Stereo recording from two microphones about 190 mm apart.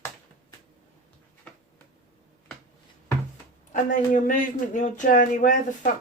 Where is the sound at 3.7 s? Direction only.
40° left (ahead or behind).